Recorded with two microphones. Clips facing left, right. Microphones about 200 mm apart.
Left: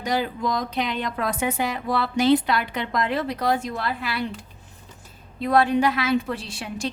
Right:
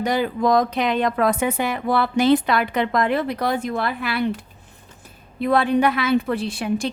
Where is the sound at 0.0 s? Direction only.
60° right (ahead or behind).